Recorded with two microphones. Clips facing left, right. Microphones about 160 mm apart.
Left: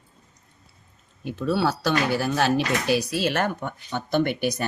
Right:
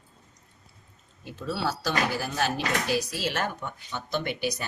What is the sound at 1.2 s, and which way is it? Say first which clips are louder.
Speech: left 7 dB; 65° left (ahead or behind).